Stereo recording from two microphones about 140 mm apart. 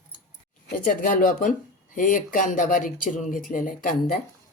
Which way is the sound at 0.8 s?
80° left.